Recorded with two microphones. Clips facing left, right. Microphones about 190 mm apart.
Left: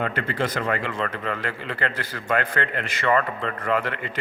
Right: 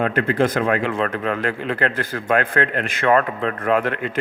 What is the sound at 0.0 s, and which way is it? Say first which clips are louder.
A man's voice: right 7 dB; 50° right (ahead or behind).